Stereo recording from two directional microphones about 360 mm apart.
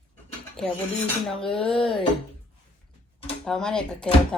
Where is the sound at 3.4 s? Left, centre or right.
Centre.